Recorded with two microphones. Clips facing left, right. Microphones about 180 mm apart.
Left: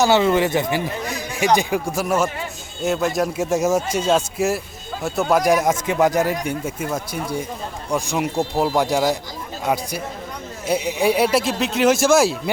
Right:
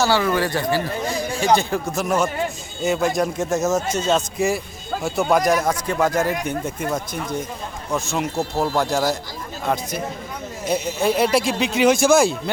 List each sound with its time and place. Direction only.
0.0 s speech: 20° left (ahead or behind)
1.1 s a sound: 15° left (ahead or behind)
1.5 s speech: 10° left (ahead or behind)